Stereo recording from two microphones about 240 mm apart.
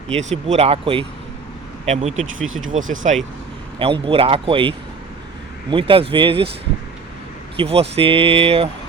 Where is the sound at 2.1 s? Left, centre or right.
Right.